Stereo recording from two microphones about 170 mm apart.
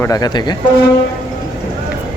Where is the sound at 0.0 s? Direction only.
20° left (ahead or behind).